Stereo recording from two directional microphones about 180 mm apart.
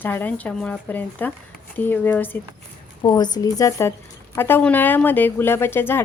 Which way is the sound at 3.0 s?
25° left (ahead or behind).